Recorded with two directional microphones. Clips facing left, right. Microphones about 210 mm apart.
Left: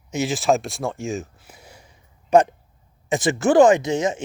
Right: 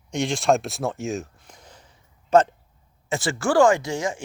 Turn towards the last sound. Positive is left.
turn(degrees=20)  # may be behind; listen again after turning